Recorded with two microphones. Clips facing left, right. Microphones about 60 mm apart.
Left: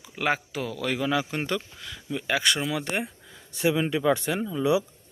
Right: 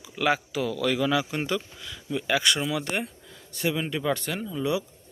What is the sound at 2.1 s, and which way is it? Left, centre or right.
Speech, left.